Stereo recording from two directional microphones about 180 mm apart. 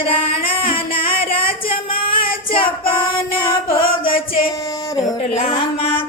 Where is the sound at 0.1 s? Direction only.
30° left (ahead or behind).